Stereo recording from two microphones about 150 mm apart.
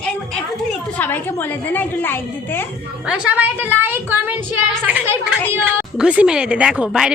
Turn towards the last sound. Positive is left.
turn(degrees=-5)  # may be behind; listen again after turning